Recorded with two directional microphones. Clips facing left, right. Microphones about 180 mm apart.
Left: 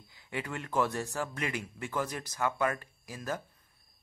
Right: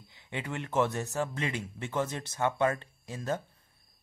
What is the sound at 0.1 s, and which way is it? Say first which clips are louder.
Speech: right 1 dB; 20° right (ahead or behind).